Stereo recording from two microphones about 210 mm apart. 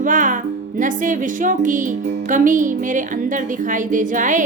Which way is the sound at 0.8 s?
40° right (ahead or behind).